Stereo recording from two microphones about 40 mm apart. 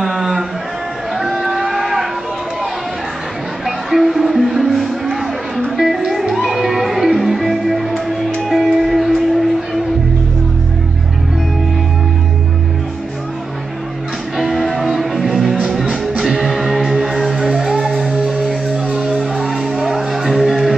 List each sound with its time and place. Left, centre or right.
0.0 s a sound: centre
1.1 s vehicle: centre
3.6 s music: centre
14.3 s music: centre
18.9 s music: right
19.3 s music: centre